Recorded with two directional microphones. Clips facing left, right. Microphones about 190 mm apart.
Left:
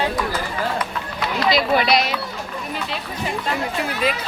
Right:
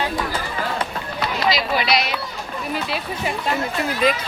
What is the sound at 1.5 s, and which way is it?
Speech, 50° left (ahead or behind).